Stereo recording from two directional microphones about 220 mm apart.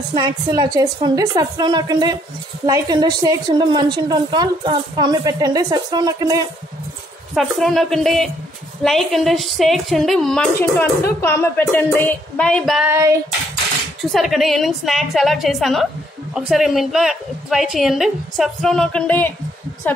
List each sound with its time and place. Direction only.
0.1 s a woman's voice: 15° right (ahead or behind)
7.3 s a woman's voice: centre (ahead or behind)
14.1 s a woman's voice: centre (ahead or behind)